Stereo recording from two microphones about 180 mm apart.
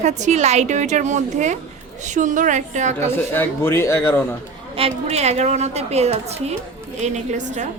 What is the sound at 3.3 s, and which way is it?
A man's voice, 15° left (ahead or behind).